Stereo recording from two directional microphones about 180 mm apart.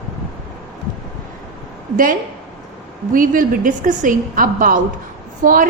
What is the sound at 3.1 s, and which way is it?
A woman's voice, 50° right (ahead or behind).